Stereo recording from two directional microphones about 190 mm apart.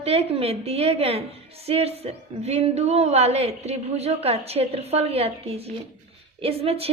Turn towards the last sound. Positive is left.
turn(degrees=-30)  # may be behind; listen again after turning